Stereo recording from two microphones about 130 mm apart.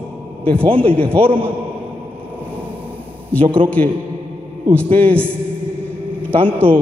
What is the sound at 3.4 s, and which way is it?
Speech, 45° right (ahead or behind).